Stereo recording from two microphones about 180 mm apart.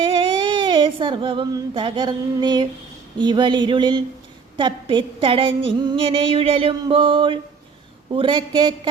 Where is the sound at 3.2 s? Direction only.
25° right (ahead or behind).